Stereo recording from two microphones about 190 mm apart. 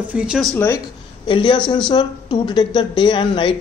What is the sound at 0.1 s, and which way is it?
Speech, 5° right (ahead or behind).